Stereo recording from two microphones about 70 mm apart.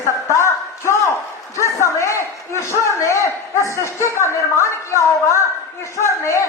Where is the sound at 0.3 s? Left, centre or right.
Left.